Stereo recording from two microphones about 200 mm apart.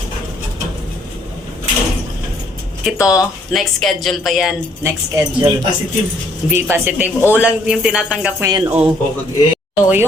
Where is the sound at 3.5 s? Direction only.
Centre (ahead or behind).